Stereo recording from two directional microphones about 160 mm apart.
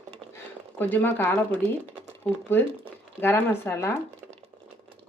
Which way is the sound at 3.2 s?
15° left (ahead or behind).